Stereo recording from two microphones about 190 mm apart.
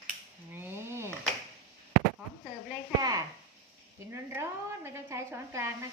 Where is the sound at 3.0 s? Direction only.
20° right (ahead or behind).